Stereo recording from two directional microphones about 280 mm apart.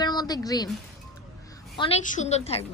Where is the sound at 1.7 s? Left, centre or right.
Centre.